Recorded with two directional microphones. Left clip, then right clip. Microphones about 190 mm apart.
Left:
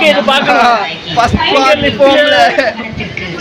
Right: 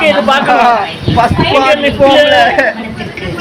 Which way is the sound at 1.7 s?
25° left (ahead or behind).